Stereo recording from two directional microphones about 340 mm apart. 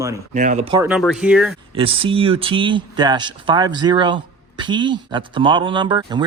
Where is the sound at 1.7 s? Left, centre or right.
Centre.